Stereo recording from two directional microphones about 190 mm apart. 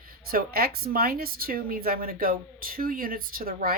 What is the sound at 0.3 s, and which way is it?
Speech, 50° right (ahead or behind).